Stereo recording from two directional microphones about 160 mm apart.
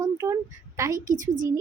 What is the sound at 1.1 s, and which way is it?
Speech, 55° right (ahead or behind).